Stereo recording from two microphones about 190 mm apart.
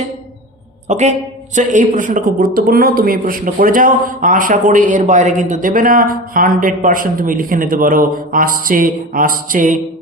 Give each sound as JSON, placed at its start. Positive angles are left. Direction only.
{"t": 0.9, "sound": "a man's voice", "side_deg": -40}